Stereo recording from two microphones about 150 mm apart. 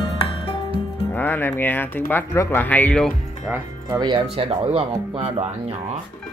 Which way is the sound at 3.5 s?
10° right (ahead or behind).